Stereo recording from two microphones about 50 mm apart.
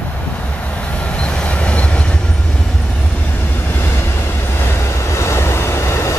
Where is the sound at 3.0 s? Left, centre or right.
Left.